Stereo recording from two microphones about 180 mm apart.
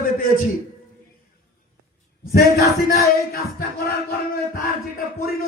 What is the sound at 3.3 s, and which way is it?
Music, 60° left (ahead or behind).